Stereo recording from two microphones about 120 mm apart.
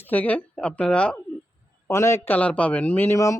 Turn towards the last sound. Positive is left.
turn(degrees=25)  # may be behind; listen again after turning